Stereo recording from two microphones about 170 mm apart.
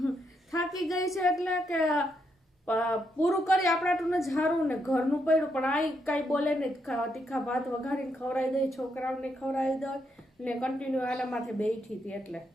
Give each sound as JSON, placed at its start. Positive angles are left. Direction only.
{"t": 0.5, "sound": "a sound", "side_deg": 20}
{"t": 0.9, "sound": "a woman's voice", "side_deg": 20}
{"t": 1.2, "sound": "a woman's voice", "side_deg": 0}
{"t": 2.6, "sound": "a woman's voice", "side_deg": 10}